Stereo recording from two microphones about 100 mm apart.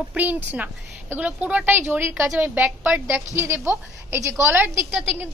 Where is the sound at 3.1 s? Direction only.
25° right (ahead or behind).